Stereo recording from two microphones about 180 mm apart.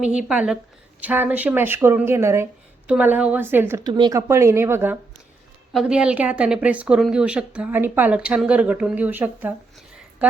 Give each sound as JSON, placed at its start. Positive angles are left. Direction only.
{"t": 0.0, "sound": "a woman's voice", "side_deg": -5}
{"t": 3.8, "sound": "a woman's voice", "side_deg": -25}